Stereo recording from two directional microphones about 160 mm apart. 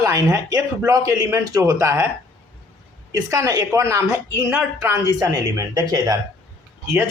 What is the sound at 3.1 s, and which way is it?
A man's voice, 20° right (ahead or behind).